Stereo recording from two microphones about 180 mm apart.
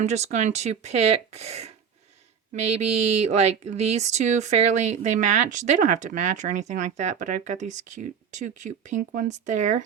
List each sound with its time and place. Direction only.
0.0 s speech: 40° right (ahead or behind)